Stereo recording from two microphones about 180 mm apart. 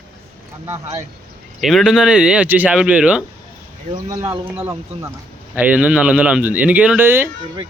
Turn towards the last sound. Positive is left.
turn(degrees=-10)  # may be behind; listen again after turning